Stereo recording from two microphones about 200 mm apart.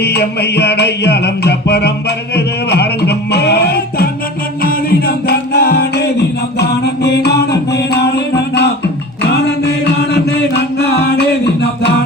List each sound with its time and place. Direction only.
0.0 s music: 55° left (ahead or behind)
10.1 s music: 55° left (ahead or behind)